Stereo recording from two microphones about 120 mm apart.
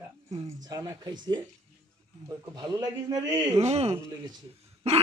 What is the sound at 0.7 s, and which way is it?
A man's voice, 30° right (ahead or behind).